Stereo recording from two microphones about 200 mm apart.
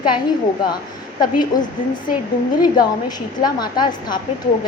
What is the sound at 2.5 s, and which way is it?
A woman's voice, 20° left (ahead or behind).